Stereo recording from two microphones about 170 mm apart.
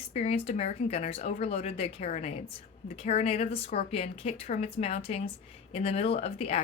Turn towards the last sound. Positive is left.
turn(degrees=40)  # may be behind; listen again after turning